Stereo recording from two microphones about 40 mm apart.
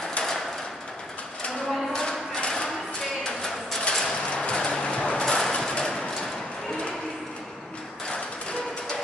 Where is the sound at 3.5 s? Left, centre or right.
Centre.